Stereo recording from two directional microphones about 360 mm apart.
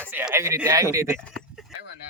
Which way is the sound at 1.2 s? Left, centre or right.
Centre.